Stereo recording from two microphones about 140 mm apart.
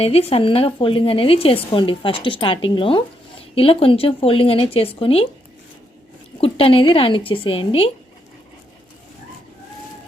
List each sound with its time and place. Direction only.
0.0 s speech: 45° left (ahead or behind)
6.4 s speech: 40° left (ahead or behind)